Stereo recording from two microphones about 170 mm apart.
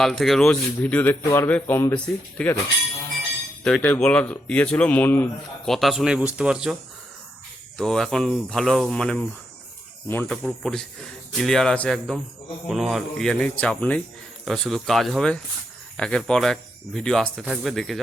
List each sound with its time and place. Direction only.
0.0 s speech: centre (ahead or behind)
3.6 s speech: 5° left (ahead or behind)
5.7 s speech: centre (ahead or behind)
7.8 s speech: 5° left (ahead or behind)